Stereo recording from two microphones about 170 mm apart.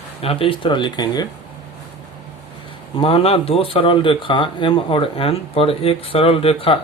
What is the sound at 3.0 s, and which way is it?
Speech, 35° left (ahead or behind).